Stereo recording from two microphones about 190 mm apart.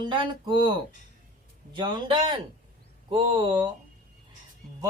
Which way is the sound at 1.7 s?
25° right (ahead or behind).